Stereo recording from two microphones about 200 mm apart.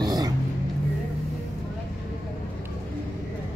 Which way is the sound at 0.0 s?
20° right (ahead or behind).